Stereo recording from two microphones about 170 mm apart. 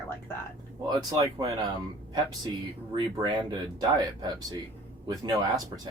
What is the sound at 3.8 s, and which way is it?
Speech, 25° right (ahead or behind).